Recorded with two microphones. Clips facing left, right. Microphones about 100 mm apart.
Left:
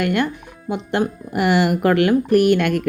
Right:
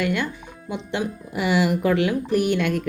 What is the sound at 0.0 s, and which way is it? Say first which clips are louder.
Speech: left 4 dB; 60° left (ahead or behind).